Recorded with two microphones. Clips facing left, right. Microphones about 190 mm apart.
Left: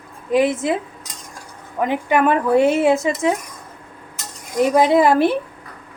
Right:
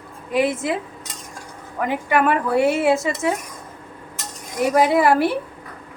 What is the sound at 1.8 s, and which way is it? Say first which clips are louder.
A woman's voice: left 2 dB; 20° left (ahead or behind).